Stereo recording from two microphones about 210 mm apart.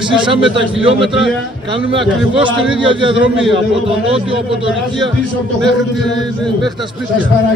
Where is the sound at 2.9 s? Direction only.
25° right (ahead or behind).